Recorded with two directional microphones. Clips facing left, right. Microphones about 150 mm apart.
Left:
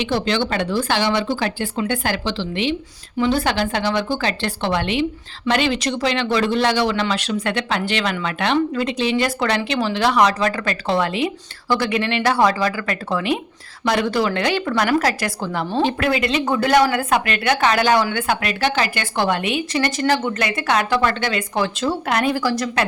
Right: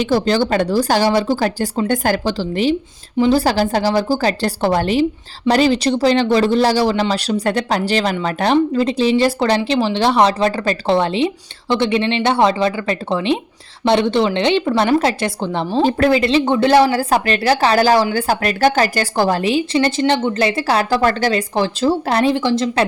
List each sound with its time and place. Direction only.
0.0 s a woman's voice: 40° right (ahead or behind)
15.8 s speech: 35° right (ahead or behind)